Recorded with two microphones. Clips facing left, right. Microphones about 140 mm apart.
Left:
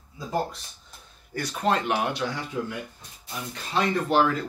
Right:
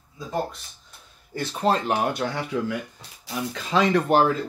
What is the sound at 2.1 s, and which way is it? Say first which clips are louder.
Speech: right 3 dB; 50° right (ahead or behind).